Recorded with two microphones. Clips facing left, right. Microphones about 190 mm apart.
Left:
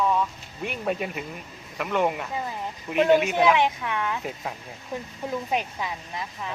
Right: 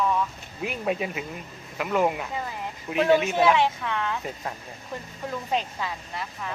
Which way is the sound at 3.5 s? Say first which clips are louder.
Even; 15° left (ahead or behind).